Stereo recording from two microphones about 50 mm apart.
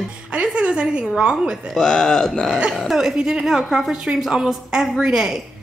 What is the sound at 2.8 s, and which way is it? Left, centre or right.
A woman's voice, centre.